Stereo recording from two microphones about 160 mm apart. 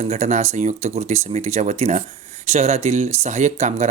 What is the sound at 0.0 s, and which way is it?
Speech, 45° right (ahead or behind).